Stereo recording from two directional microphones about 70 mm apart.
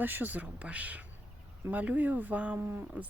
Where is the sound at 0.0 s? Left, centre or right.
Right.